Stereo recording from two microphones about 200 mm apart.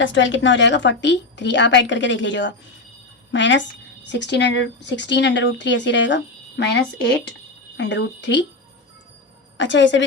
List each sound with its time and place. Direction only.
0.0 s speech: 65° left (ahead or behind)
9.6 s speech: 65° left (ahead or behind)